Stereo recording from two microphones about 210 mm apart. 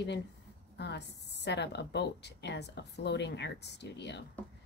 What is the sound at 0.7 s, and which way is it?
Speech, 55° left (ahead or behind).